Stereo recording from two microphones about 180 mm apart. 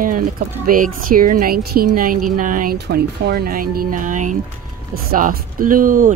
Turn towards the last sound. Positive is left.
turn(degrees=-50)  # may be behind; listen again after turning